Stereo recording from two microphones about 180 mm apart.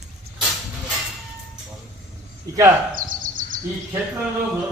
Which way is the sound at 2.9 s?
50° right (ahead or behind).